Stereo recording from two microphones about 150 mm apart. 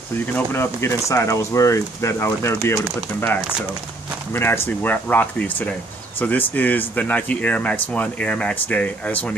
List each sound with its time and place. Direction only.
0.3 s speech: 15° left (ahead or behind)